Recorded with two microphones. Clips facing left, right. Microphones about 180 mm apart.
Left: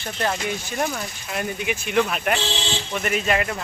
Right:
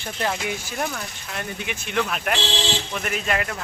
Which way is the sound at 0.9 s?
10° left (ahead or behind).